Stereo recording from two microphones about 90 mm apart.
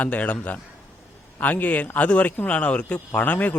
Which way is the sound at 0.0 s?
15° left (ahead or behind).